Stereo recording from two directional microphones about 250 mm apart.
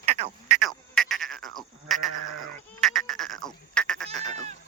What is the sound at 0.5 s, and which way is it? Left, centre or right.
Frog, centre.